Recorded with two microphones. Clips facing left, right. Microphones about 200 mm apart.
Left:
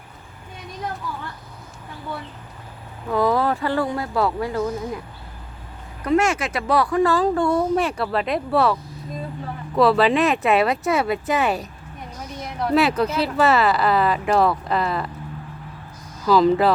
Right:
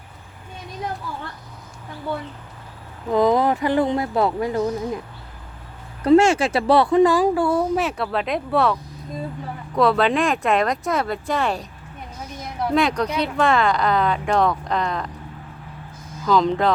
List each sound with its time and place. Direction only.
3.1 s speech: 20° right (ahead or behind)
6.1 s speech: 30° right (ahead or behind); by 11.7 s 5° left (ahead or behind)
12.7 s speech: 5° left (ahead or behind)
16.2 s speech: 5° left (ahead or behind)